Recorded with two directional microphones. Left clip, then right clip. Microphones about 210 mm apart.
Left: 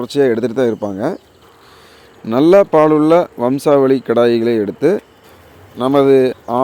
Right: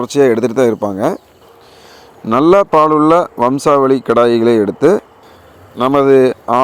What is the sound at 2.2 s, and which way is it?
Speech, 5° right (ahead or behind).